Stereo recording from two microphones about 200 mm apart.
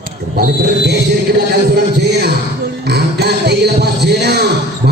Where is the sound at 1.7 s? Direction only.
55° right (ahead or behind).